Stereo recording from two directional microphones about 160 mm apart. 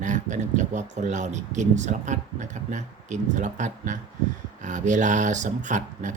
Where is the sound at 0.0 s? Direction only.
50° right (ahead or behind).